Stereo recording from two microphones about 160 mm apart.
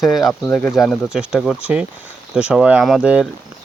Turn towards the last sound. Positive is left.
turn(degrees=-5)  # may be behind; listen again after turning